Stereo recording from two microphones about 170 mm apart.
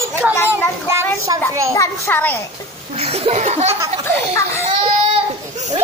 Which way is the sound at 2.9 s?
35° right (ahead or behind).